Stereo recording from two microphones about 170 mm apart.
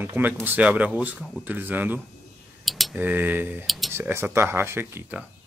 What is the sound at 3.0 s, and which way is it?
Speech, 10° right (ahead or behind).